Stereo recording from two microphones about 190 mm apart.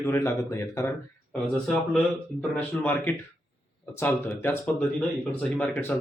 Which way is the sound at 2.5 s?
10° left (ahead or behind).